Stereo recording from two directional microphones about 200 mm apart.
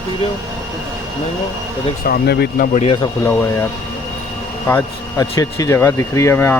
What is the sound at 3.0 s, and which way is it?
Speech, 10° left (ahead or behind).